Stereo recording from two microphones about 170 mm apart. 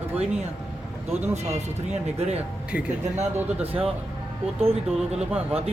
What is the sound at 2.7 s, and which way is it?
Speech, 10° right (ahead or behind).